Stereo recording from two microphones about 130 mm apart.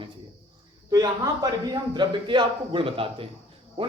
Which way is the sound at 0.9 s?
25° right (ahead or behind).